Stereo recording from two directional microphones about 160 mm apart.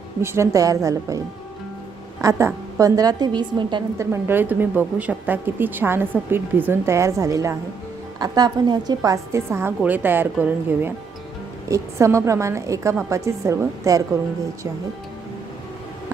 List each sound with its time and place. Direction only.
0.2 s a woman's voice: 15° right (ahead or behind)
2.2 s a woman's voice: 20° right (ahead or behind)
3.9 s a woman's voice: 15° right (ahead or behind)